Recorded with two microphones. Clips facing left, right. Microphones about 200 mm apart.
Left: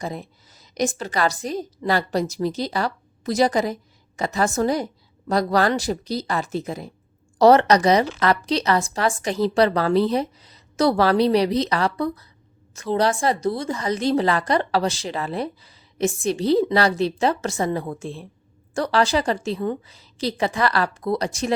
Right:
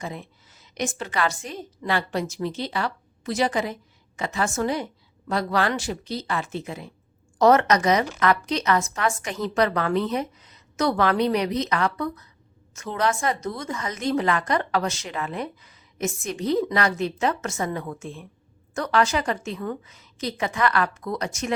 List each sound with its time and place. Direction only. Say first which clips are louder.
0.0 s speech: left 4 dB; 40° left (ahead or behind)